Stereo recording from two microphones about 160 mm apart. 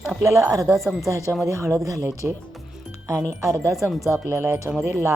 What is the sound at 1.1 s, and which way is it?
Speech, 20° right (ahead or behind).